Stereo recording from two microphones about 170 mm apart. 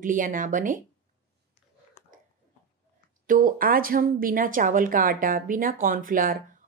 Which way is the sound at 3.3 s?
55° right (ahead or behind).